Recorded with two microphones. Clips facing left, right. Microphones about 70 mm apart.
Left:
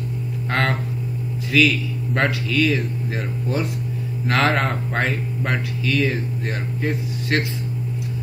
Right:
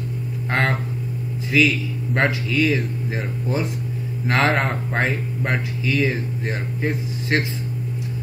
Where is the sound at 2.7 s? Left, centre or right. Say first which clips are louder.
Even; centre.